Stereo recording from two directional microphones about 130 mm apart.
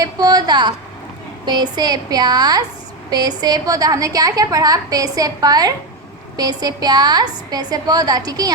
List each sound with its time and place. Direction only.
0.0 s a woman's voice: 30° right (ahead or behind)